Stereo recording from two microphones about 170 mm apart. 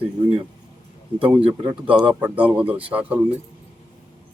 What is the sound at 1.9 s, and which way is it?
Speech, 30° right (ahead or behind).